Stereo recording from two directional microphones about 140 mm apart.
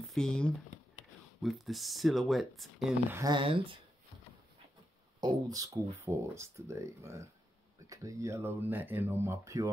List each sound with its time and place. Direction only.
0.1 s speech: 5° left (ahead or behind)
3.3 s speech: 35° right (ahead or behind)
5.2 s speech: 30° right (ahead or behind)